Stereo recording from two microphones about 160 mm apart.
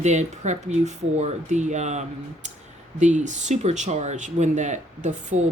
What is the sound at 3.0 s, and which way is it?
Speech, 50° right (ahead or behind).